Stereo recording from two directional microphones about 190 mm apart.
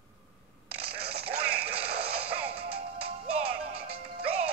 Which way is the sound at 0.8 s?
55° right (ahead or behind).